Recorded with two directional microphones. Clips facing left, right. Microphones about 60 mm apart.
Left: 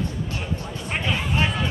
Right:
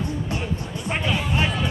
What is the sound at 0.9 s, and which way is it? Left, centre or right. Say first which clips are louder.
Music: right 1 dB; centre.